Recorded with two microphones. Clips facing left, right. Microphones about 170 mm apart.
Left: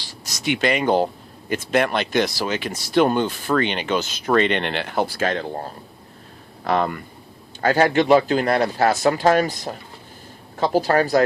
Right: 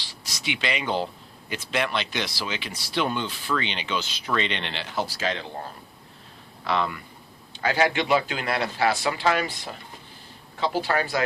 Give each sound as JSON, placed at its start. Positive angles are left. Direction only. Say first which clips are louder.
{"t": 0.0, "sound": "speech", "louder": "left 7 dB", "side_deg": 45}
{"t": 6.7, "sound": "speech", "louder": "left 5 dB", "side_deg": 45}